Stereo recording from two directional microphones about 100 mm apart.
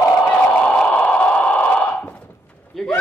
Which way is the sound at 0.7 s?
10° left (ahead or behind).